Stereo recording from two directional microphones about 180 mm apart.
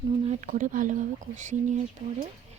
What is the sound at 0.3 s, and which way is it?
Speech, 45° right (ahead or behind).